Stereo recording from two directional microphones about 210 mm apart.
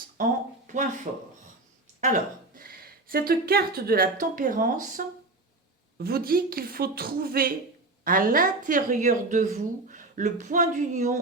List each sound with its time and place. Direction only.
0.2 s a woman's voice: 35° right (ahead or behind)
2.0 s a woman's voice: 35° right (ahead or behind)